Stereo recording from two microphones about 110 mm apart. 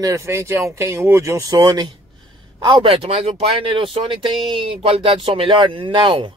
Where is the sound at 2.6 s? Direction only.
50° right (ahead or behind).